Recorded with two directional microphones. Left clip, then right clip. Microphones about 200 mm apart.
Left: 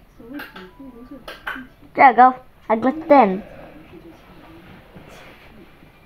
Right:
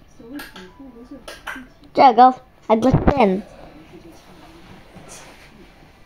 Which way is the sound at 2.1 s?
55° right (ahead or behind).